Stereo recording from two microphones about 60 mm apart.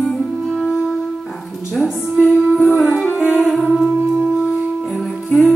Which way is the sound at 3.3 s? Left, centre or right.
Centre.